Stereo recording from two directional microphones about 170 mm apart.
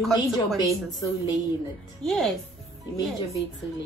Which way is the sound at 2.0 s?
5° left (ahead or behind).